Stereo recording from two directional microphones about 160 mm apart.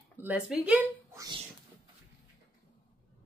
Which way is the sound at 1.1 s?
25° right (ahead or behind).